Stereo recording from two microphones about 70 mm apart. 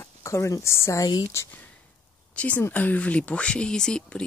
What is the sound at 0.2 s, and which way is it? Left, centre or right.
Speech, left.